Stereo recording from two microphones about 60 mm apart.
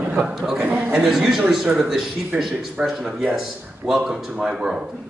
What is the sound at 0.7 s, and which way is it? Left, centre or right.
Speech, right.